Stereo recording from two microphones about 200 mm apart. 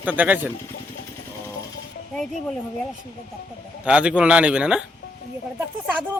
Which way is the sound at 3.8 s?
5° right (ahead or behind).